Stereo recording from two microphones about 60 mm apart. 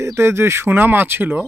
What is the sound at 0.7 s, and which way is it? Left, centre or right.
Speech, right.